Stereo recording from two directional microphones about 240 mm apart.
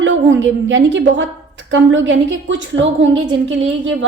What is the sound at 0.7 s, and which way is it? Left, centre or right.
A woman's voice, right.